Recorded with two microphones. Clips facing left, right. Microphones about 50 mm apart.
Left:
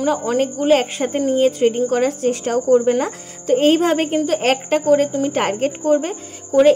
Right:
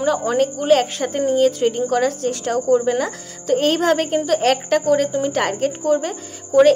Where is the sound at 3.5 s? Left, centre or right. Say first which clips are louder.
Left 2 dB; centre.